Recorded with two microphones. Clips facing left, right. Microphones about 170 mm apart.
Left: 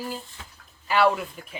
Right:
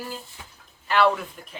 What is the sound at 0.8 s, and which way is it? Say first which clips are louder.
Speech: even; 10° left (ahead or behind).